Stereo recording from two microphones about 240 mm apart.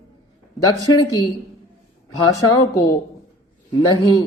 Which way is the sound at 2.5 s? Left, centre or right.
Centre.